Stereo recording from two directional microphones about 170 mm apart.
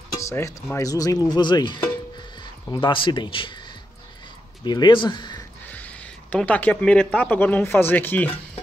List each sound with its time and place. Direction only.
0.2 s speech: 15° left (ahead or behind)
5.7 s speech: 10° left (ahead or behind)